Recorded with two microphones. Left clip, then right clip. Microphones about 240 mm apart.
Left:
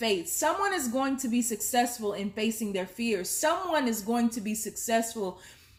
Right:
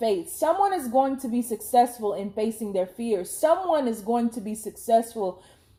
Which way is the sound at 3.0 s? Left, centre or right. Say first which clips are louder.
Right 2 dB; left.